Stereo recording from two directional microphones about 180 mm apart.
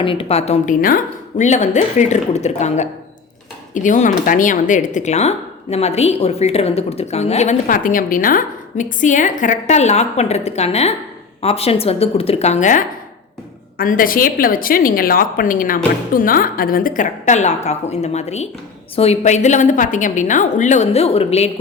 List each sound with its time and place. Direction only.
0.0 s a woman's voice: 30° left (ahead or behind)